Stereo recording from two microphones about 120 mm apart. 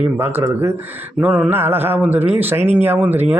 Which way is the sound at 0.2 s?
20° right (ahead or behind).